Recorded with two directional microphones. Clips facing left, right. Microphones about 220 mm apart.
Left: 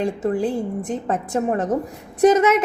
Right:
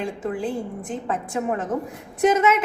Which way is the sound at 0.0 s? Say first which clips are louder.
Left 5 dB; 40° left (ahead or behind).